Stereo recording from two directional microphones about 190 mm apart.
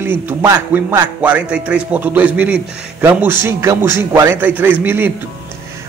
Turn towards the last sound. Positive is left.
turn(degrees=-10)  # may be behind; listen again after turning